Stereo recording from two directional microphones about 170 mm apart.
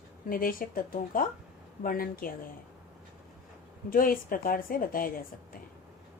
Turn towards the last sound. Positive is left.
turn(degrees=55)  # may be behind; listen again after turning